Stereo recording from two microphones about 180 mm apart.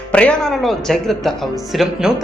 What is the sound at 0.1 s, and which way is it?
Speech, 5° left (ahead or behind).